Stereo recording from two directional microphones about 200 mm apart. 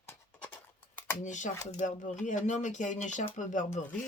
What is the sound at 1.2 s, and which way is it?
Speech, 40° left (ahead or behind).